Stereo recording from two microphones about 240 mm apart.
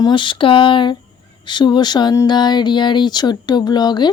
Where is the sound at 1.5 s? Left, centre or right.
Centre.